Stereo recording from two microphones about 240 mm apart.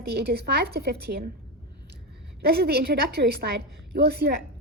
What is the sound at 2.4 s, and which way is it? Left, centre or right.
A woman's voice, right.